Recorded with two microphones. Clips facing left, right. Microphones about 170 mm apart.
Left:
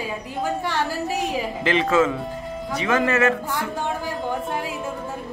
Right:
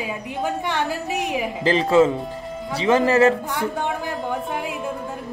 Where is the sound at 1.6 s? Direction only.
35° right (ahead or behind).